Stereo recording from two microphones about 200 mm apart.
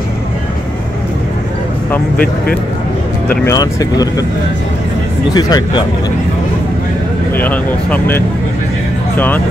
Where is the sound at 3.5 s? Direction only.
15° left (ahead or behind).